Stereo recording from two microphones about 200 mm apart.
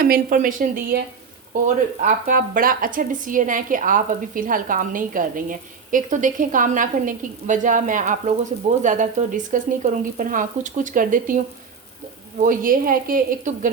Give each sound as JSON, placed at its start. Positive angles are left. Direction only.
{"t": 0.0, "sound": "speech", "side_deg": -45}
{"t": 12.4, "sound": "speech", "side_deg": -45}